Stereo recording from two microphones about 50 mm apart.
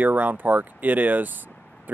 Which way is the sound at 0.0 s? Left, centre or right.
Right.